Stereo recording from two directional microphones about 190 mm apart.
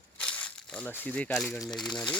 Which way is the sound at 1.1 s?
5° left (ahead or behind).